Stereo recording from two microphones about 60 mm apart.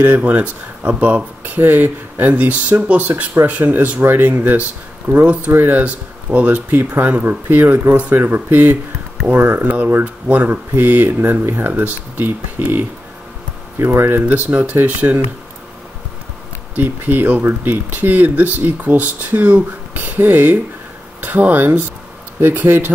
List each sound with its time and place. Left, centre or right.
0.0 s speech: right
1.4 s speech: right
5.1 s speech: right
5.5 s speech: right
16.7 s speech: right